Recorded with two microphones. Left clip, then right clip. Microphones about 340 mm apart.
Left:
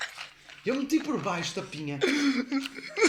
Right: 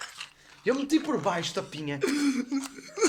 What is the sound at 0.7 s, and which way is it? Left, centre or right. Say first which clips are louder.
Speech: right 2 dB; right.